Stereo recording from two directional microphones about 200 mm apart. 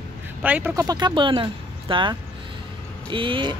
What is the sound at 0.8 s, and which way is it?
Speech, 20° right (ahead or behind).